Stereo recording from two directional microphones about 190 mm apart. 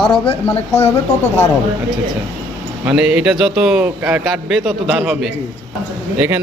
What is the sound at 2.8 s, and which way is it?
A man's voice, 5° right (ahead or behind).